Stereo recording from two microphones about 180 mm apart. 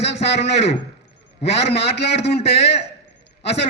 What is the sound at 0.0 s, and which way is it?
Speech, 70° left (ahead or behind).